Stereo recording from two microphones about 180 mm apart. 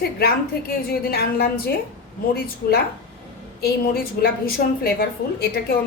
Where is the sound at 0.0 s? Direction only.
60° left (ahead or behind).